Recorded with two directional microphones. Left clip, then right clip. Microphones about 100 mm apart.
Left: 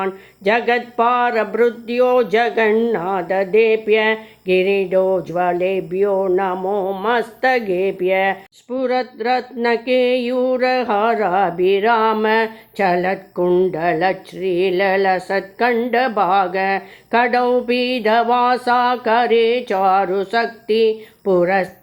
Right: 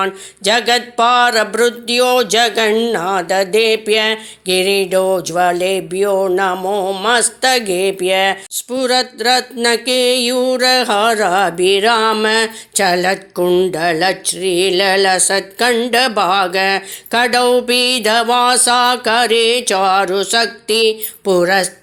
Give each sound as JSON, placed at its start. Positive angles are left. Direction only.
{"t": 0.0, "sound": "speech", "side_deg": -25}
{"t": 6.6, "sound": "speech", "side_deg": -20}